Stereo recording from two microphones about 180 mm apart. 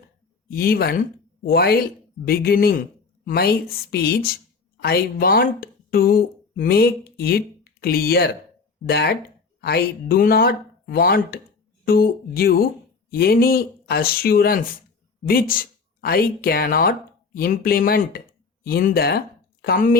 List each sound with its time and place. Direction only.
0.5 s speech: 60° left (ahead or behind)